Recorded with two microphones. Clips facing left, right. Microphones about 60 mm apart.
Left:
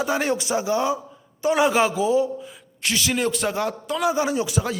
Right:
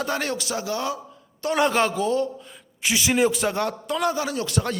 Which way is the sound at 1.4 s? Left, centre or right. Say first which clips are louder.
Left 2 dB; centre.